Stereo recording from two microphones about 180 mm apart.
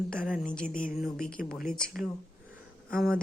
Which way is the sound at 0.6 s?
50° left (ahead or behind).